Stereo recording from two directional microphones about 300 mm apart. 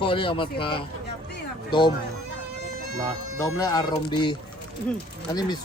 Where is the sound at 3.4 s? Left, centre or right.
Centre.